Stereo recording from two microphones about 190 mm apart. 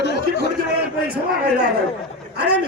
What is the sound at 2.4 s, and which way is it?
Speech, 60° right (ahead or behind).